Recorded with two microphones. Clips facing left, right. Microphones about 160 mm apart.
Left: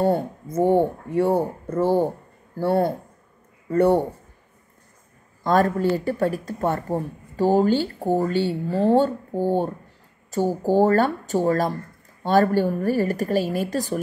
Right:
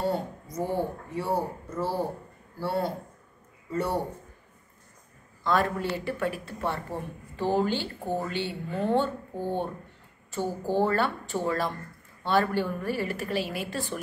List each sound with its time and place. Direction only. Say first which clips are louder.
0.0 s speech: left 8 dB; 55° left (ahead or behind)
5.4 s a woman's voice: left 7 dB; 40° left (ahead or behind)